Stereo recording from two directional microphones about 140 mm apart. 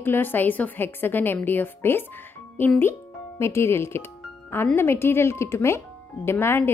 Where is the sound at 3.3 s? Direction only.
20° left (ahead or behind).